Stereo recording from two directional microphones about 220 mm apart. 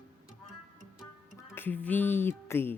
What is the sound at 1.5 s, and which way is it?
A woman's voice, 10° left (ahead or behind).